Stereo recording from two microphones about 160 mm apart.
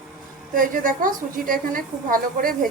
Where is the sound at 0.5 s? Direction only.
60° right (ahead or behind).